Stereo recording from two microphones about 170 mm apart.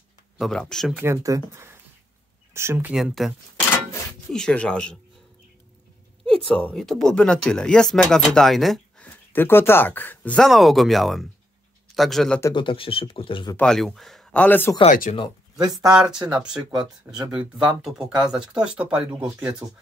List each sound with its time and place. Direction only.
0.4 s speech: 5° left (ahead or behind)
0.9 s speech: 15° right (ahead or behind)
2.9 s speech: 5° right (ahead or behind)
6.2 s speech: 5° left (ahead or behind)
12.5 s speech: 30° left (ahead or behind)
13.6 s speech: 5° left (ahead or behind)
14.9 s speech: 45° left (ahead or behind)
15.7 s speech: 5° right (ahead or behind)
19.6 s speech: 20° right (ahead or behind)